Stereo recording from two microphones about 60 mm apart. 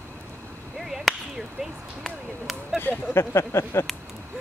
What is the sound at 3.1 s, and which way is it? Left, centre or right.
Speech, left.